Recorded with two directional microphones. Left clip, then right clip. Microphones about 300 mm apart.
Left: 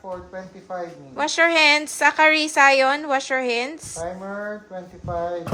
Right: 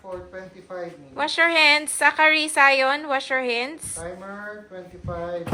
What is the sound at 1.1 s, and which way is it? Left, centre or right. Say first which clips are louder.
A woman's voice: left 1 dB; centre.